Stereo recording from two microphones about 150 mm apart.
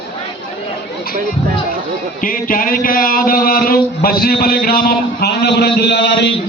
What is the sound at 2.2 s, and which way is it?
A man's voice, 70° left (ahead or behind).